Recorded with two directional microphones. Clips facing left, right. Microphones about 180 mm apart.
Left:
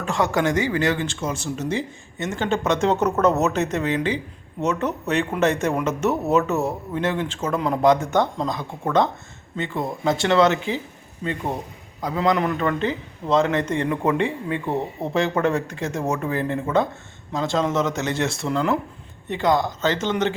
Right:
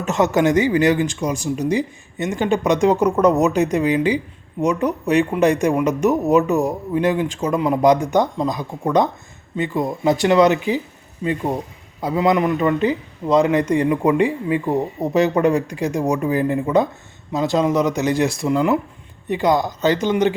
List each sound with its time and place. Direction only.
0.0 s a man's voice: 20° right (ahead or behind)